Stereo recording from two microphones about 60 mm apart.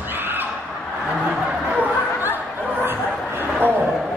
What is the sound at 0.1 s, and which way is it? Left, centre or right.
Squawk, right.